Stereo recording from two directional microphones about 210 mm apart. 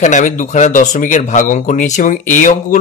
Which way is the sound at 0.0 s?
35° left (ahead or behind).